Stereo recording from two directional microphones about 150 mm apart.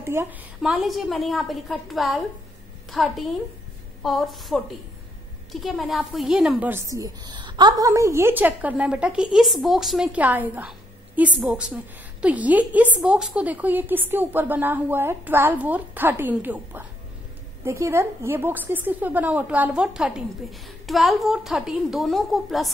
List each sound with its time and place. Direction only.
0.0 s a woman's voice: 15° right (ahead or behind)
0.6 s a woman's voice: centre (ahead or behind)
6.7 s a woman's voice: 20° right (ahead or behind); by 22.7 s centre (ahead or behind)